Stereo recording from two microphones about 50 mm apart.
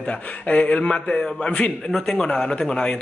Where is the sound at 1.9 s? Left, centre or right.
Centre.